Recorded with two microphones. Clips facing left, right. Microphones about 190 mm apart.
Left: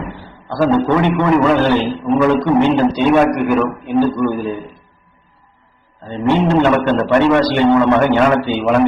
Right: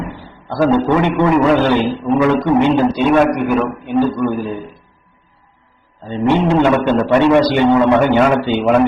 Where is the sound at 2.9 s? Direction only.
Centre (ahead or behind).